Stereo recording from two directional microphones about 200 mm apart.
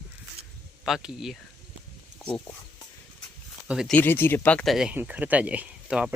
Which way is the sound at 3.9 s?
10° left (ahead or behind).